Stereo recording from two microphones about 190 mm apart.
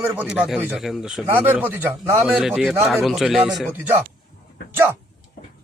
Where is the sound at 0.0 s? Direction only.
15° right (ahead or behind).